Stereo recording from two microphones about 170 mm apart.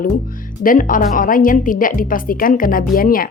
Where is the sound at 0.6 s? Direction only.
55° left (ahead or behind).